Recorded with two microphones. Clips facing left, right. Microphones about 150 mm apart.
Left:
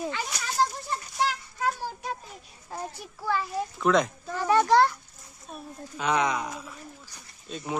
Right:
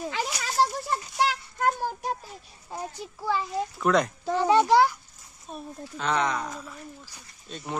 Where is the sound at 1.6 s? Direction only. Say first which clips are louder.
Right 4 dB; 50° right (ahead or behind).